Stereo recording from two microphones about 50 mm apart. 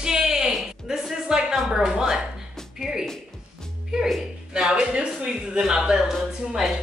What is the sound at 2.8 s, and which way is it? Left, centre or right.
Music, centre.